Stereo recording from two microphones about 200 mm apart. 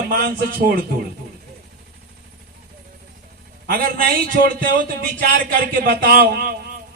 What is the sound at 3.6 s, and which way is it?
A man's voice, 45° right (ahead or behind).